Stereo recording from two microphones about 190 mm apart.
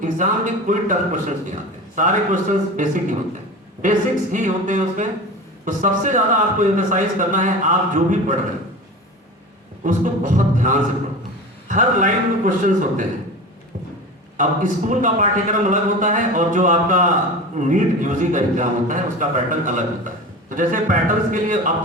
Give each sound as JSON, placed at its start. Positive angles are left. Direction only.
{"t": 0.0, "sound": "a man's voice", "side_deg": -40}
{"t": 9.8, "sound": "a man's voice", "side_deg": -40}
{"t": 14.3, "sound": "a man's voice", "side_deg": -40}